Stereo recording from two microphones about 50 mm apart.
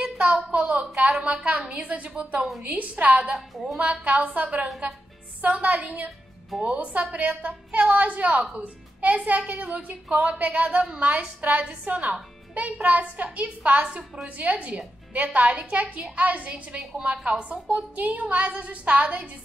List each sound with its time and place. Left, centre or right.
0.0 s a sound: right
1.8 s a woman's voice: right
3.3 s a woman's voice: centre
3.7 s a woman's voice: right